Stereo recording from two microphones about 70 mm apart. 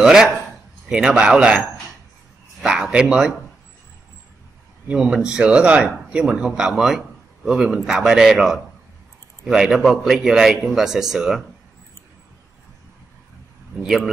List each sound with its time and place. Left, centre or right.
0.0 s speech: centre
2.6 s speech: centre
4.9 s a man's voice: centre
13.8 s a man's voice: centre